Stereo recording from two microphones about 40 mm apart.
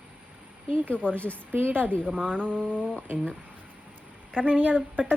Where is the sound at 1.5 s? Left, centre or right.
Right.